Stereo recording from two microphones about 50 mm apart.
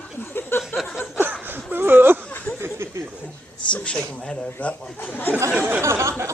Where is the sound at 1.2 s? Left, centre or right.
Right.